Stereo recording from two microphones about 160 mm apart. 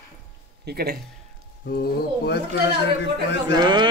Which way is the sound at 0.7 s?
80° right.